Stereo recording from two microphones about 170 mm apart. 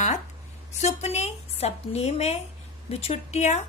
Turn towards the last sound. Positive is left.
turn(degrees=40)  # may be behind; listen again after turning